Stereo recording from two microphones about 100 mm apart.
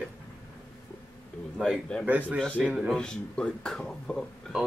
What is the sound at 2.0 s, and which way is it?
Speech, 15° right (ahead or behind).